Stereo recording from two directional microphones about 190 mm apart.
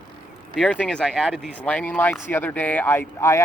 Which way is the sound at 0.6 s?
5° left (ahead or behind).